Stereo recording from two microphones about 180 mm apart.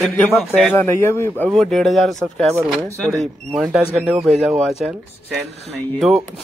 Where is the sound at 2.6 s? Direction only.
15° right (ahead or behind).